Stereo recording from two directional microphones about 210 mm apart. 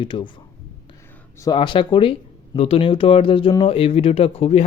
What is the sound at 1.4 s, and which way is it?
Speech, 20° left (ahead or behind).